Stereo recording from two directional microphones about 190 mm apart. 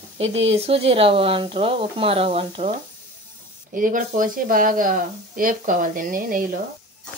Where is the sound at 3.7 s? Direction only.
45° right (ahead or behind).